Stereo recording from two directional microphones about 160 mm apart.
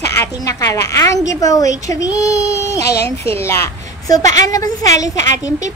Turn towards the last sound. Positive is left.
turn(degrees=20)  # may be behind; listen again after turning